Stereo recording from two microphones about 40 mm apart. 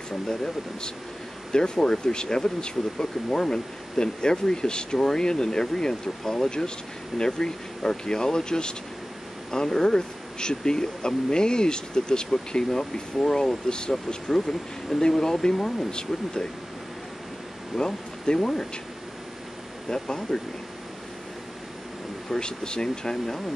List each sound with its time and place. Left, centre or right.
0.1 s speech: centre
17.7 s speech: centre
19.9 s speech: centre
22.3 s speech: centre